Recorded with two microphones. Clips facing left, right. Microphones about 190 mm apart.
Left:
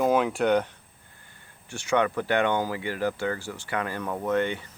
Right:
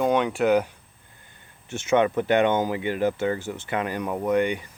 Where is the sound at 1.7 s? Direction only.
20° right (ahead or behind).